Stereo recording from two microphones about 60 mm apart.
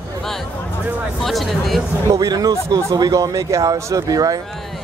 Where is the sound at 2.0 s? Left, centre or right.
Right.